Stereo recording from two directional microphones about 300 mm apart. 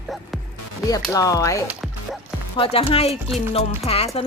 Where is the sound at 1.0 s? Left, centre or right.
Centre.